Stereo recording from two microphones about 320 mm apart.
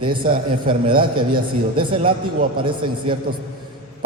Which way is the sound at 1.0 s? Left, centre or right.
Centre.